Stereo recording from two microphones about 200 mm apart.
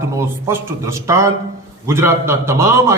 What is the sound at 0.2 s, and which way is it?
A man's voice, 15° right (ahead or behind).